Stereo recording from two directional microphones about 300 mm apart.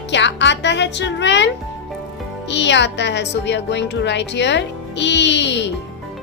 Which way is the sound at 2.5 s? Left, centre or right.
Left.